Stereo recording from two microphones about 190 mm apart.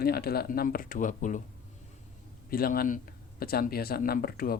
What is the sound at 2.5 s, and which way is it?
Speech, 50° left (ahead or behind).